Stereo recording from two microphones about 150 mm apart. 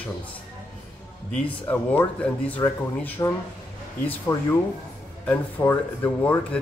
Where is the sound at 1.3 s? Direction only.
10° left (ahead or behind).